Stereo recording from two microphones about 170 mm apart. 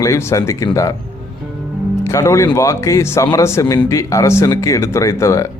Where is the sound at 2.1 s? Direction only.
15° left (ahead or behind).